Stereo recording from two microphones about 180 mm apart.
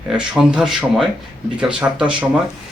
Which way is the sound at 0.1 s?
5° right (ahead or behind).